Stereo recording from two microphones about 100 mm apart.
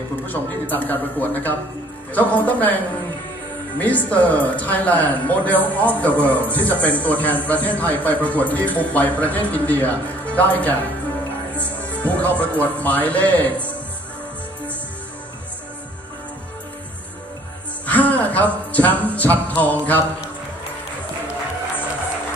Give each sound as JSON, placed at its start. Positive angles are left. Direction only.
{"t": 0.3, "sound": "speech", "side_deg": 20}
{"t": 11.9, "sound": "speech", "side_deg": 15}
{"t": 17.8, "sound": "speech", "side_deg": 15}